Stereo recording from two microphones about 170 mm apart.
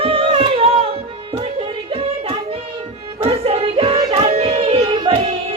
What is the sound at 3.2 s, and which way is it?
Music, 35° right (ahead or behind).